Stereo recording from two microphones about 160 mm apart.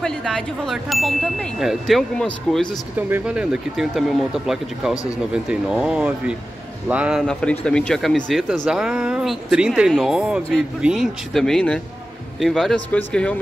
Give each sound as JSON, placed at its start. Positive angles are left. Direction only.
{"t": 0.0, "sound": "speech", "side_deg": 5}
{"t": 3.0, "sound": "speech", "side_deg": -10}